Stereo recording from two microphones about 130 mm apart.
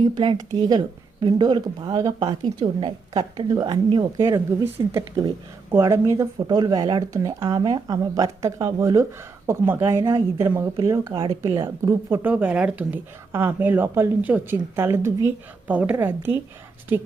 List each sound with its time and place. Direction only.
0.2 s speech: 35° right (ahead or behind)
4.2 s speech: 20° right (ahead or behind)
12.2 s speech: 10° right (ahead or behind)